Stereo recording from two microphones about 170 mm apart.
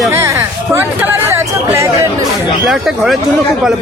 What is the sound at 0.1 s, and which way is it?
Hubbub, 15° right (ahead or behind).